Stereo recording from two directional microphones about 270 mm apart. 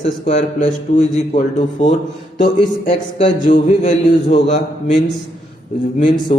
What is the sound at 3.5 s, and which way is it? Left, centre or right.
A man's voice, left.